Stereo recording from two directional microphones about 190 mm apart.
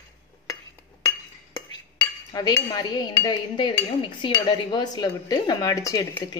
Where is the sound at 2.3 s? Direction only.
20° left (ahead or behind).